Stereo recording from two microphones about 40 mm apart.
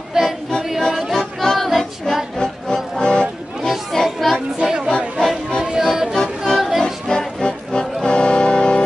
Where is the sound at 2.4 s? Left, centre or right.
Left.